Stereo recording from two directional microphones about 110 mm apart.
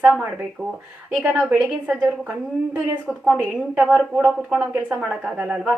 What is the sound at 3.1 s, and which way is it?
A woman's voice, centre (ahead or behind).